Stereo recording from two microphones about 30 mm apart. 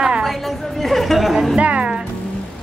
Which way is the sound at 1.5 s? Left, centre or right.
Right.